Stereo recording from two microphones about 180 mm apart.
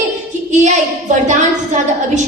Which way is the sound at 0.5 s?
40° right (ahead or behind).